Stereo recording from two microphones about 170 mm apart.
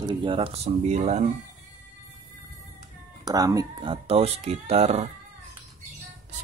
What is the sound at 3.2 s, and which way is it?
Speech, 20° right (ahead or behind).